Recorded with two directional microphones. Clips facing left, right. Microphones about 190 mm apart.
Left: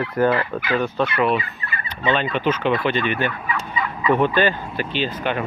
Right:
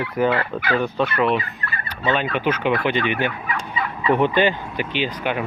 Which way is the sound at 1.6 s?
60° right (ahead or behind).